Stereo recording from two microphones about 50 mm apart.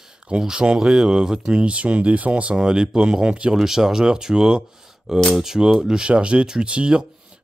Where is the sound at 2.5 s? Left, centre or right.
Centre.